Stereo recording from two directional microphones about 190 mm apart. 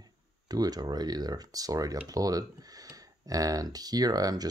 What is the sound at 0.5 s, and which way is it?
Speech, 20° right (ahead or behind).